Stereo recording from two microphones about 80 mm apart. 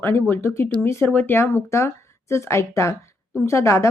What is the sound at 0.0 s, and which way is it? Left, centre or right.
Speech, left.